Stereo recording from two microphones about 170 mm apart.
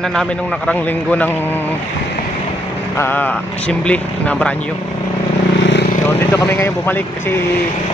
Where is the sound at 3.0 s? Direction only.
10° left (ahead or behind).